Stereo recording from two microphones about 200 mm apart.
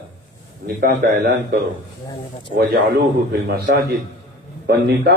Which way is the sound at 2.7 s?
50° right (ahead or behind).